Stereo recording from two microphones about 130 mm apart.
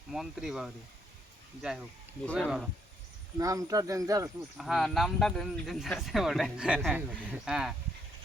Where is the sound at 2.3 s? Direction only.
Centre (ahead or behind).